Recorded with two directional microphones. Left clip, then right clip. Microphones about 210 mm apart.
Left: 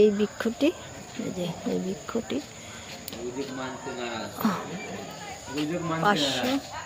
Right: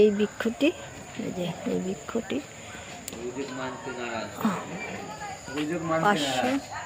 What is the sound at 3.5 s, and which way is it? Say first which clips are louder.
Speech: even; 55° left (ahead or behind).